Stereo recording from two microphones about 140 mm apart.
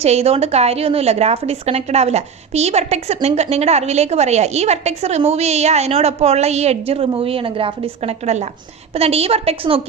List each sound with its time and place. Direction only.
0.0 s a woman's voice: 50° right (ahead or behind)